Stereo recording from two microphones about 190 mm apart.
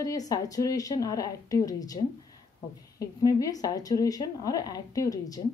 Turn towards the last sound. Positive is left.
turn(degrees=20)  # may be behind; listen again after turning